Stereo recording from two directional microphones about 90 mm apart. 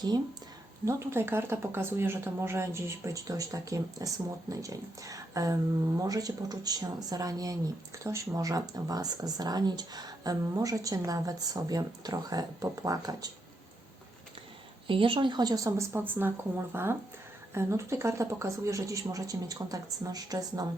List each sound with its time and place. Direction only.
0.9 s speech: 30° right (ahead or behind); by 13.3 s 45° right (ahead or behind)
14.8 s speech: 75° right (ahead or behind); by 20.7 s 45° right (ahead or behind)